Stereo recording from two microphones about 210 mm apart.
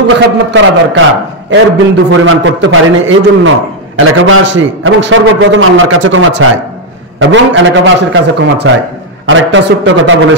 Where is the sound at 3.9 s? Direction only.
80° right.